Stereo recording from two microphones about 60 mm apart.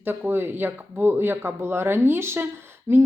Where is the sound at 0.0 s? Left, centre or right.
Right.